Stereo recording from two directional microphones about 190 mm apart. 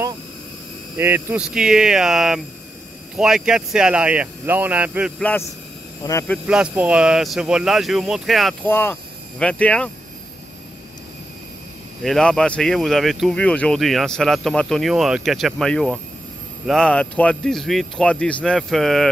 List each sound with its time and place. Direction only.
0.9 s speech: 10° right (ahead or behind)
6.0 s speech: 20° left (ahead or behind)
6.4 s speech: 5° right (ahead or behind)
8.6 s speech: 10° left (ahead or behind)
12.0 s speech: 5° left (ahead or behind)